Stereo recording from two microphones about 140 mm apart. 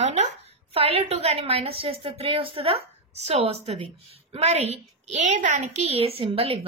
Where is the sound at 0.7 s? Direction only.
45° right (ahead or behind).